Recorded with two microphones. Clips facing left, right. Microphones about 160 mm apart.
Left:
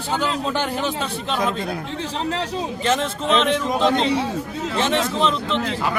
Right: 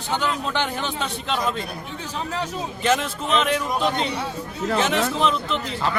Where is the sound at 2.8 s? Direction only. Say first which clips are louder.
Even; 5° right (ahead or behind).